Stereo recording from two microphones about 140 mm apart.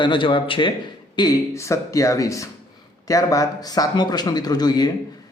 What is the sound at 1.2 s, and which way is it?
Speech, 25° left (ahead or behind).